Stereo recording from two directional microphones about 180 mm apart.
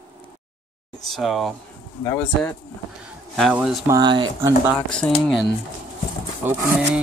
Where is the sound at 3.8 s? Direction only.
25° right (ahead or behind).